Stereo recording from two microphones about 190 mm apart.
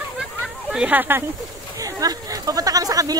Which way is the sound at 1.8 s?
20° right (ahead or behind).